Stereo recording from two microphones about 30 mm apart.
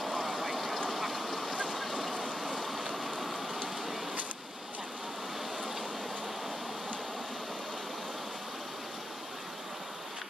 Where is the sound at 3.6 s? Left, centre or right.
Centre.